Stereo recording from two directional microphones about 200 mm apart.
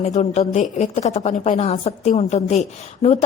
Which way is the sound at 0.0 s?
35° left (ahead or behind).